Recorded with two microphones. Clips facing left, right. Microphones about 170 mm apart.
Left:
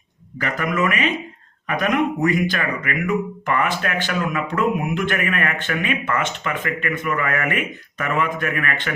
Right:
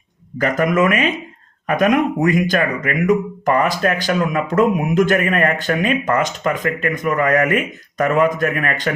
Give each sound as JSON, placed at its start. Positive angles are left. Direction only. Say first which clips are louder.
{"t": 0.3, "sound": "speech", "louder": "right 6 dB", "side_deg": -45}